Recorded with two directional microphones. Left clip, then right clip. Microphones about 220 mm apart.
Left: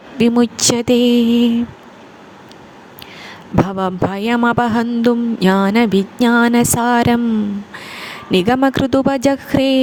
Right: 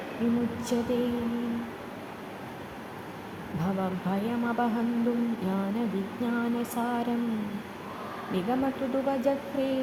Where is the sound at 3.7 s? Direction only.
45° left (ahead or behind).